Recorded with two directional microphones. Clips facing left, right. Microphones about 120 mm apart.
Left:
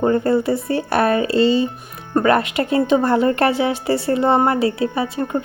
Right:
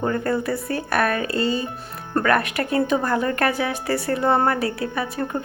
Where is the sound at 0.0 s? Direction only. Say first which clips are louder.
Left 6 dB; 25° left (ahead or behind).